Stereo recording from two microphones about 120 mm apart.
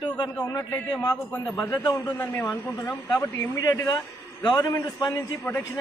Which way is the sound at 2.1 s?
15° left (ahead or behind).